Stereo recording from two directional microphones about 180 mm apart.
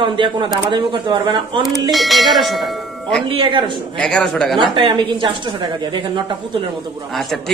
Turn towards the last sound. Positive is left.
turn(degrees=0)  # may be behind; listen again after turning